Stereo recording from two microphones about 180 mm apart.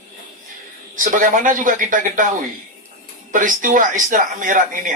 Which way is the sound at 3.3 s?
45° right (ahead or behind).